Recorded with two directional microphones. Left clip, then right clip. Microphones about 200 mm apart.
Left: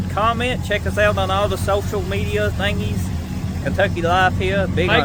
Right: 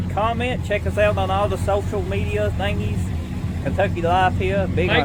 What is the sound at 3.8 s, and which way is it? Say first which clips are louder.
Speech: left 2 dB; 5° right (ahead or behind).